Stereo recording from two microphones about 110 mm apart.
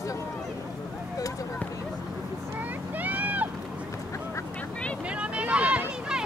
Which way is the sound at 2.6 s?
15° right (ahead or behind).